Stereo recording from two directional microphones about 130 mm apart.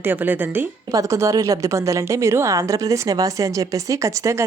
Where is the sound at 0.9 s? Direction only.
25° right (ahead or behind).